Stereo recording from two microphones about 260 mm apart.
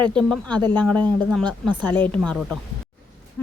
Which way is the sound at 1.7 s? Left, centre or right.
Centre.